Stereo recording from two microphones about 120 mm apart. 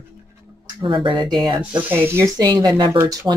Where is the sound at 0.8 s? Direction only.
40° right (ahead or behind).